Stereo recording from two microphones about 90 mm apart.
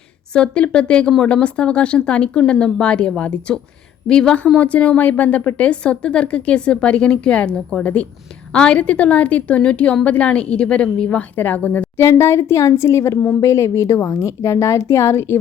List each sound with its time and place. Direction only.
0.3 s a woman's voice: 10° left (ahead or behind)
11.9 s a woman's voice: 30° left (ahead or behind)
13.1 s speech: 20° left (ahead or behind)
13.4 s a woman's voice: 35° left (ahead or behind)